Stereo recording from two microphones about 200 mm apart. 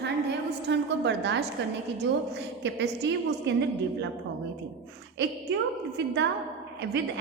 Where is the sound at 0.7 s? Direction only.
60° right (ahead or behind).